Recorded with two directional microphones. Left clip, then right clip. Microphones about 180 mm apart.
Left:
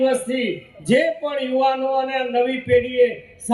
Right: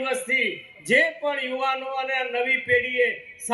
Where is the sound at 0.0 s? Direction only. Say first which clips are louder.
Left 4 dB; 30° right (ahead or behind).